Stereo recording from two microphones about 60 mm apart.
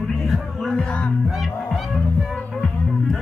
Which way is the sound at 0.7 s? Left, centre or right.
Left.